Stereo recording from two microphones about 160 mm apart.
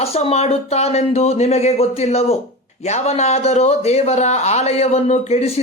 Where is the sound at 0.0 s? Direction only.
40° left (ahead or behind).